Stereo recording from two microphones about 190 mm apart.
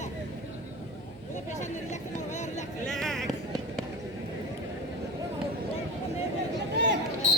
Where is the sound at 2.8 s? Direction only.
Centre (ahead or behind).